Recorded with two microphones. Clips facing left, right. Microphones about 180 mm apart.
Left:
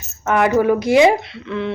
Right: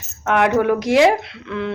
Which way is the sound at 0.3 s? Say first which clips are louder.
Left 1 dB; centre (ahead or behind).